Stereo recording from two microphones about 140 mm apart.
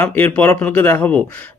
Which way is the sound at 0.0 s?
10° left (ahead or behind).